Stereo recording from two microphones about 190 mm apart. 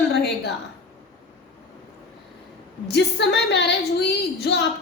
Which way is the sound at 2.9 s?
65° left (ahead or behind).